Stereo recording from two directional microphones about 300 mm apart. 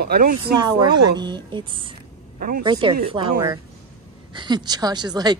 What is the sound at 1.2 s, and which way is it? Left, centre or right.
Speech, centre.